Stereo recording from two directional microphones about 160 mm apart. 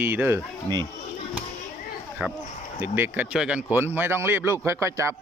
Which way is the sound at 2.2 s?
5° right (ahead or behind).